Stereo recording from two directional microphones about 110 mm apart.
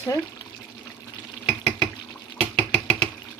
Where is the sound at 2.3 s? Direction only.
10° left (ahead or behind).